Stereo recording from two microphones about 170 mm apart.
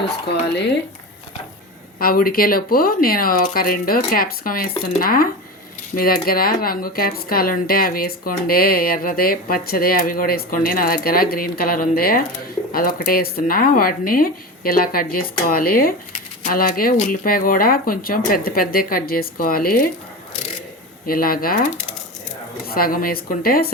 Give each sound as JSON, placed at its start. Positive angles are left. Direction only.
{"t": 2.0, "sound": "speech", "side_deg": 60}
{"t": 21.1, "sound": "speech", "side_deg": 60}
{"t": 22.6, "sound": "speech", "side_deg": 60}